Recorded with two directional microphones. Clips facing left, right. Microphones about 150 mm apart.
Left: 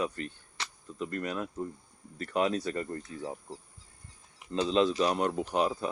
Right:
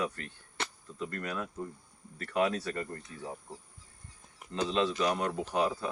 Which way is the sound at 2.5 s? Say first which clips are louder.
Left 3 dB; 20° left (ahead or behind).